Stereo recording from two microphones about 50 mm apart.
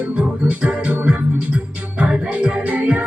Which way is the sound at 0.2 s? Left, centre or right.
Right.